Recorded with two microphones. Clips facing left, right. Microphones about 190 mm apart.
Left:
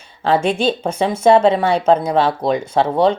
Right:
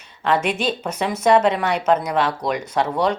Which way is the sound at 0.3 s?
30° left (ahead or behind).